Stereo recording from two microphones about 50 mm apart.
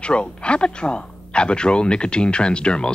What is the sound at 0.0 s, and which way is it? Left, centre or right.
Speech, left.